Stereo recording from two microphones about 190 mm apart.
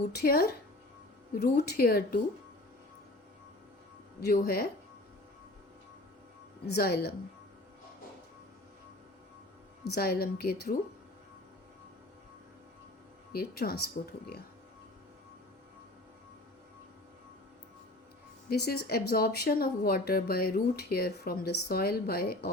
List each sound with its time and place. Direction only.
0.0 s a woman's voice: 55° left (ahead or behind)
4.2 s speech: 55° left (ahead or behind)
6.7 s a woman's voice: 55° left (ahead or behind)
9.8 s a woman's voice: 55° left (ahead or behind)
13.3 s speech: 55° left (ahead or behind)
18.4 s speech: 55° left (ahead or behind)